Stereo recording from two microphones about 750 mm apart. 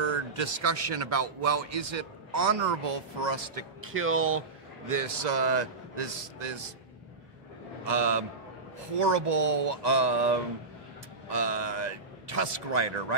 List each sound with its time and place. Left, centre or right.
0.0 s a man's voice: right
3.9 s speech: centre
4.9 s speech: right
7.8 s speech: right